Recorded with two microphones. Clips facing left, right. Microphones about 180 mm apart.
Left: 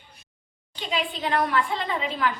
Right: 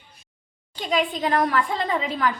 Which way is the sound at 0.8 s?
45° right (ahead or behind).